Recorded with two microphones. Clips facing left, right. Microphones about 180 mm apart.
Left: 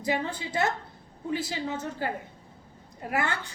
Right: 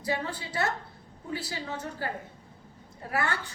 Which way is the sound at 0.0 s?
20° left (ahead or behind).